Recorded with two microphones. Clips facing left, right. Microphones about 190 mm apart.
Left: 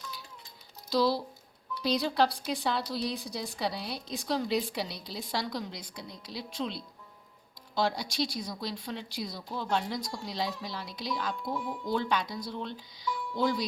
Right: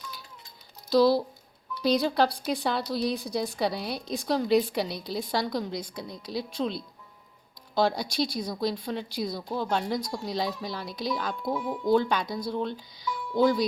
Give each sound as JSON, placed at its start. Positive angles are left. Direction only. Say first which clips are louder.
{"t": 0.9, "sound": "a woman's voice", "louder": "right 6 dB", "side_deg": -50}
{"t": 7.8, "sound": "a woman's voice", "louder": "right 4 dB", "side_deg": -50}